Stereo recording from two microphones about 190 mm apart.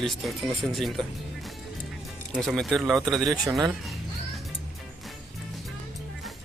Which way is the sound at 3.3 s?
20° right (ahead or behind).